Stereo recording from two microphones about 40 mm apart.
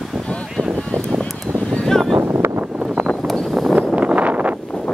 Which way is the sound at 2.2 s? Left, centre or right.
Right.